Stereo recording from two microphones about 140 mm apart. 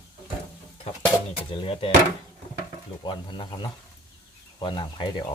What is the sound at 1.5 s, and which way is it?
Speech, 40° left (ahead or behind).